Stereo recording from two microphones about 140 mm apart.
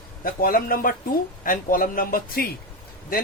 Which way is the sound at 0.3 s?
90° left.